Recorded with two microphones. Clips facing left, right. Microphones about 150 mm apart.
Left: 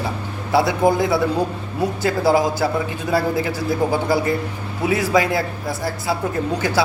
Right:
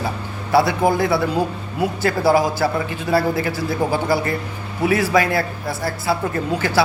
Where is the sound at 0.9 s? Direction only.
20° left (ahead or behind).